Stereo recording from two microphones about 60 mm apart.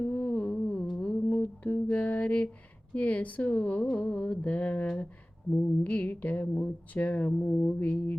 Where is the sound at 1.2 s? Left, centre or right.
Left.